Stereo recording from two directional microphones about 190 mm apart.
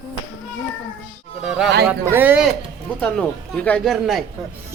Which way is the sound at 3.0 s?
5° left (ahead or behind).